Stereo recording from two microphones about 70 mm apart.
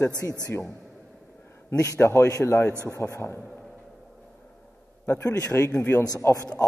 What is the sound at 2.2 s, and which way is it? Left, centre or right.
A man's voice, left.